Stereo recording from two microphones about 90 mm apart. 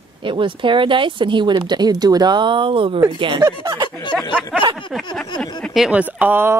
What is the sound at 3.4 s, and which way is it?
Speech, 55° right (ahead or behind).